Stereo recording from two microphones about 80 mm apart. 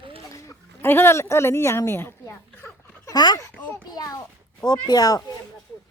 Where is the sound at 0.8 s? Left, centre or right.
Left.